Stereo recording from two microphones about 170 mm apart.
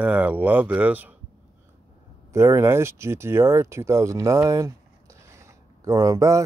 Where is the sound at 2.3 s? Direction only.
15° right (ahead or behind).